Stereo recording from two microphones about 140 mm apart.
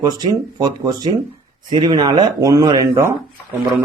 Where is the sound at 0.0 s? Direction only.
30° right (ahead or behind).